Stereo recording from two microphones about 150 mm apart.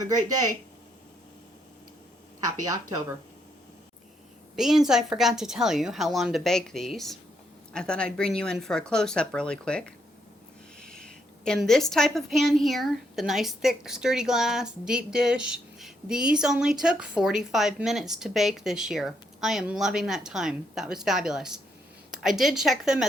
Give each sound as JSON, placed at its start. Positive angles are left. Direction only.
{"t": 0.2, "sound": "speech", "side_deg": -25}
{"t": 4.5, "sound": "a woman's voice", "side_deg": 0}